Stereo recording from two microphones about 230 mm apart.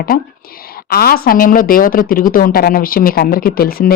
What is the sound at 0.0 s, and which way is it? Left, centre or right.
Speech, left.